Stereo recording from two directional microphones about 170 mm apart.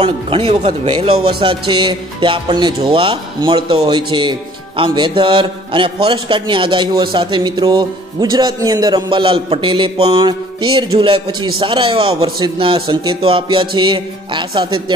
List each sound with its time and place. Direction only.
0.0 s speech: 35° right (ahead or behind)